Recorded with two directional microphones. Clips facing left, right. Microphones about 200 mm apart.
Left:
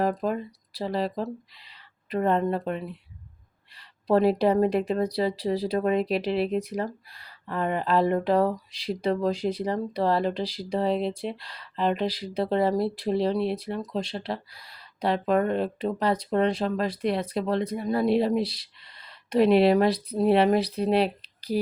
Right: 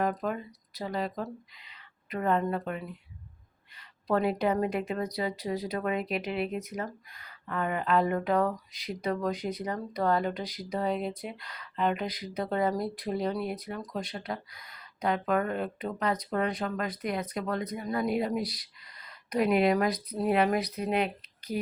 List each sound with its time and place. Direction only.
0.0 s speech: 30° left (ahead or behind)